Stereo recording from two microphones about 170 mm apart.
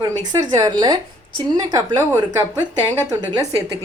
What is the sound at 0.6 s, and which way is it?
Speech, 25° right (ahead or behind).